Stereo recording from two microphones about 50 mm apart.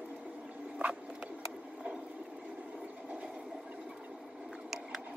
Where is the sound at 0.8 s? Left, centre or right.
Right.